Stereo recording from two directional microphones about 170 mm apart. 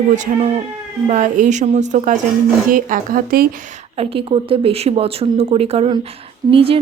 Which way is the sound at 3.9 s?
35° right (ahead or behind).